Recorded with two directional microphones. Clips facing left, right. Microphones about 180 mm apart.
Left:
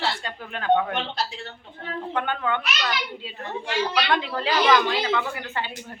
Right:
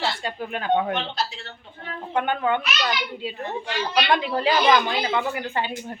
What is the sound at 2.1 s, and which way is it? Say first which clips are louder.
Speech: right 4 dB; 15° right (ahead or behind).